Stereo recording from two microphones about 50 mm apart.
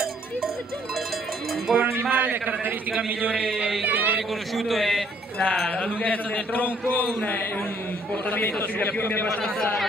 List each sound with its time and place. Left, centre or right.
1.7 s cowbell: centre
2.0 s a man's voice: right
3.8 s a sound: right
4.6 s speech: centre
6.0 s a man's voice: left